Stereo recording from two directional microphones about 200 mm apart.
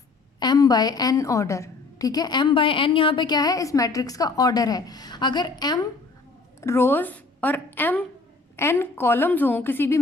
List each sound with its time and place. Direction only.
0.3 s a woman's voice: 20° left (ahead or behind)